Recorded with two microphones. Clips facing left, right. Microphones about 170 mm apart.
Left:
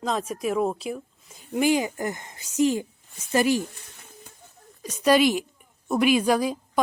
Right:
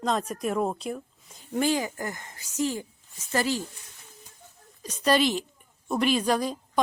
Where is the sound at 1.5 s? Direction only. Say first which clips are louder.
Left 3 dB; 15° left (ahead or behind).